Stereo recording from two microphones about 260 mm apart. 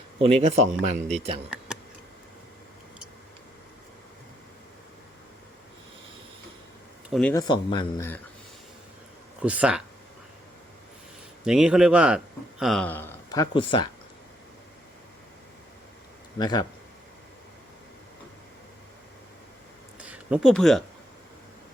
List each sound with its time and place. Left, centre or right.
0.2 s speech: right
7.1 s speech: centre
7.4 s speech: centre
9.4 s speech: centre
11.4 s speech: centre
16.4 s speech: centre
20.0 s a sound: centre